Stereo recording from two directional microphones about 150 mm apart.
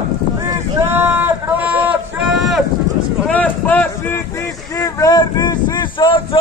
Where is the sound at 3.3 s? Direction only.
10° left (ahead or behind).